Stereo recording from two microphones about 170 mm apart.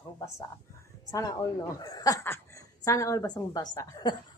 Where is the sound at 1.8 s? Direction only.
20° left (ahead or behind).